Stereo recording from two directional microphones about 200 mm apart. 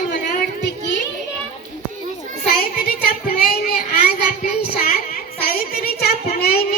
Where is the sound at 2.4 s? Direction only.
50° left (ahead or behind).